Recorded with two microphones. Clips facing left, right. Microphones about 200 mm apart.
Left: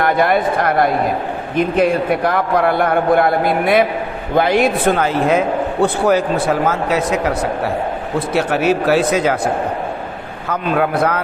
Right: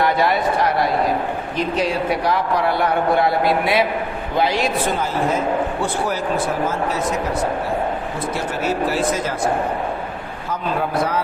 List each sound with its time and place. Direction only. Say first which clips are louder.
0.0 s speech: left 3 dB; 50° left (ahead or behind); by 9.4 s 70° left (ahead or behind)
10.5 s speech: left 5 dB; 60° left (ahead or behind)